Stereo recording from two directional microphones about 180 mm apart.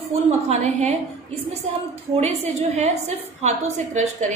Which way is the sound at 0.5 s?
40° right (ahead or behind).